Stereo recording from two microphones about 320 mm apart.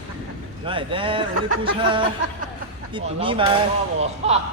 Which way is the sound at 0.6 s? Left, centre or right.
Centre.